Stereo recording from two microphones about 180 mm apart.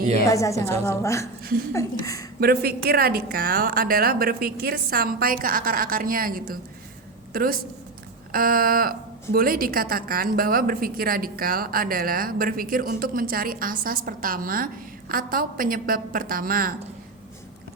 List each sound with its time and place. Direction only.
0.3 s a woman's voice: 15° left (ahead or behind)
2.4 s a woman's voice: 60° right (ahead or behind)
8.3 s a woman's voice: 55° right (ahead or behind)